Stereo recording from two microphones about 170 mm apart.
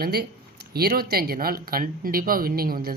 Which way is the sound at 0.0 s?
65° right (ahead or behind).